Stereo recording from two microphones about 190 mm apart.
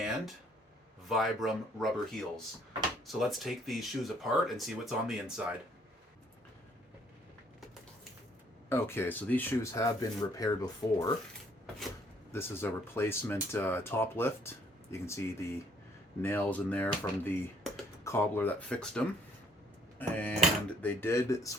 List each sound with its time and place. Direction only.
1.0 s speech: centre (ahead or behind)
8.7 s speech: 10° left (ahead or behind)
12.3 s speech: 10° left (ahead or behind)